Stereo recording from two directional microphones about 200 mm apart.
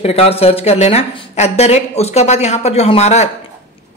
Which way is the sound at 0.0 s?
30° left (ahead or behind).